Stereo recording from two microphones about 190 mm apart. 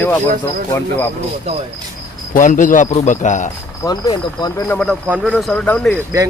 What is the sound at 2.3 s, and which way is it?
A man's voice, 45° left (ahead or behind).